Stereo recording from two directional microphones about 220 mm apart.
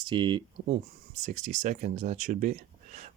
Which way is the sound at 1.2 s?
30° right (ahead or behind).